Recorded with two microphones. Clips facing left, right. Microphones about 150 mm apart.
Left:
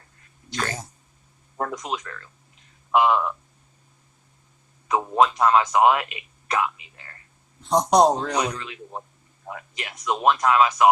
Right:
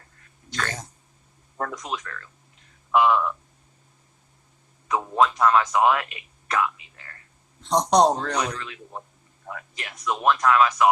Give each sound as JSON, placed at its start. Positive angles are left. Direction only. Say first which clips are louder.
{"t": 0.6, "sound": "a sound", "louder": "left 2 dB", "side_deg": 10}
{"t": 1.5, "sound": "a man's voice", "louder": "left 2 dB", "side_deg": 15}
{"t": 4.9, "sound": "speech", "louder": "left 2 dB", "side_deg": 20}
{"t": 7.6, "sound": "a man's voice", "louder": "left 1 dB", "side_deg": 5}